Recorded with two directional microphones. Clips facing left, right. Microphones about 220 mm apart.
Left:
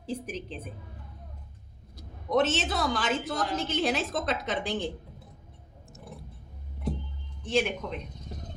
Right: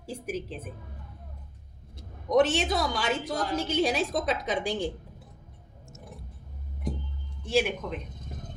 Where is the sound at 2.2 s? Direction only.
15° right (ahead or behind).